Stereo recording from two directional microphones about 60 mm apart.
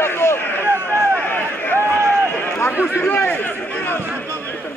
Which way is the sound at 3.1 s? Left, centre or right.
Left.